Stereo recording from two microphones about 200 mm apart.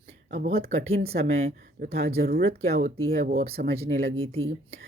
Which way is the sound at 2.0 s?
50° right (ahead or behind).